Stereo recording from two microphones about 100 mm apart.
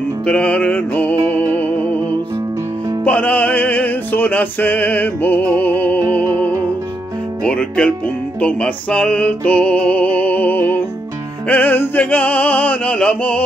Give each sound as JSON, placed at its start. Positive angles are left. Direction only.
{"t": 0.2, "sound": "music", "side_deg": 15}
{"t": 3.0, "sound": "music", "side_deg": 15}
{"t": 7.4, "sound": "music", "side_deg": 10}